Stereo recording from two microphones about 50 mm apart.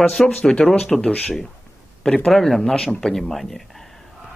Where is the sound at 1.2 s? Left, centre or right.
Centre.